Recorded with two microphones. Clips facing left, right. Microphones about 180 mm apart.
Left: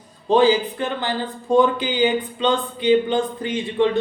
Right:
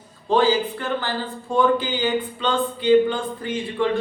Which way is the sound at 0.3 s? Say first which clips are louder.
Left 3 dB; 20° left (ahead or behind).